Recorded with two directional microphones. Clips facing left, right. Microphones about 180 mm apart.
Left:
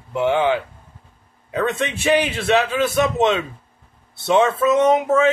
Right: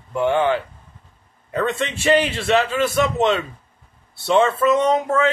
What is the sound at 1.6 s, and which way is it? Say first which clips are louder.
Speech: even; 15° left (ahead or behind).